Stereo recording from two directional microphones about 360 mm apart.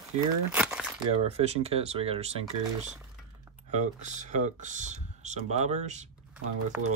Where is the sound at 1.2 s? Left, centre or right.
Centre.